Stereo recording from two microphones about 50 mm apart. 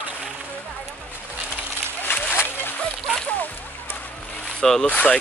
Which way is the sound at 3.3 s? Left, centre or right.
Left.